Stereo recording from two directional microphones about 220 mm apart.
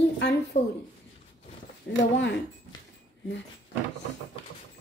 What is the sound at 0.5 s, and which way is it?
Speech, 35° left (ahead or behind).